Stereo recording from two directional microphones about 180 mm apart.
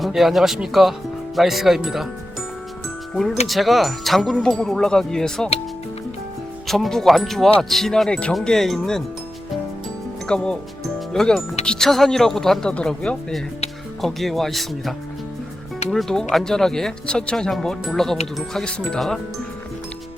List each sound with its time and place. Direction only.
0.0 s speech: centre (ahead or behind)
3.4 s speech: centre (ahead or behind)
6.7 s speech: centre (ahead or behind)
10.2 s speech: 5° left (ahead or behind)